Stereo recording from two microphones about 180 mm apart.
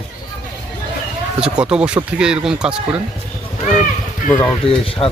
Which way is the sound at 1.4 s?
5° right (ahead or behind).